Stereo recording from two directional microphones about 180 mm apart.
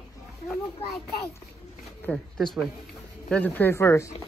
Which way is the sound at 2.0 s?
5° left (ahead or behind).